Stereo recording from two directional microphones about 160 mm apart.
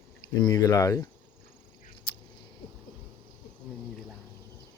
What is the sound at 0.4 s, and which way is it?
Speech, 25° left (ahead or behind).